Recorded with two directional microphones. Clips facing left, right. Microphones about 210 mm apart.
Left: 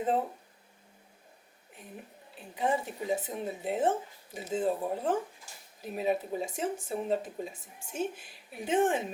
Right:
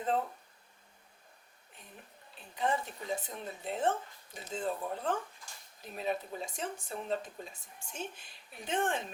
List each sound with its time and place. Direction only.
0.0 s speech: 15° left (ahead or behind)
1.7 s a woman's voice: 5° left (ahead or behind)